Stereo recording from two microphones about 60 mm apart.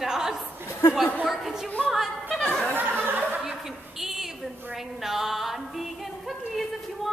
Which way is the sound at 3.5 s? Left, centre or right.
Centre.